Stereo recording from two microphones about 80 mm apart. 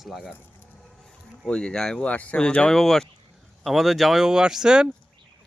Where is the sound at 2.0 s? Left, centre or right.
Centre.